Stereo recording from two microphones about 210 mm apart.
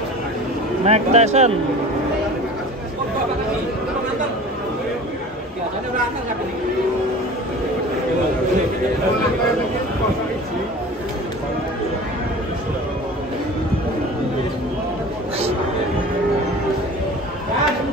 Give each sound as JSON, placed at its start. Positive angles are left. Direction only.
{"t": 0.8, "sound": "speech", "side_deg": -30}